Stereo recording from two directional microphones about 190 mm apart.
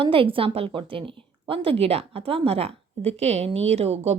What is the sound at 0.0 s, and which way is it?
Speech, 30° right (ahead or behind).